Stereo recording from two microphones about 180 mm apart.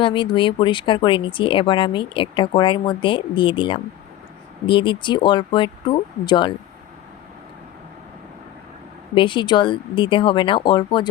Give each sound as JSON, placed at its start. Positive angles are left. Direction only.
{"t": 0.0, "sound": "speech", "side_deg": 25}
{"t": 9.1, "sound": "speech", "side_deg": 25}